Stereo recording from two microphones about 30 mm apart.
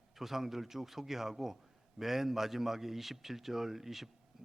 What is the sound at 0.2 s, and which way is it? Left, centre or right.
A man's voice, centre.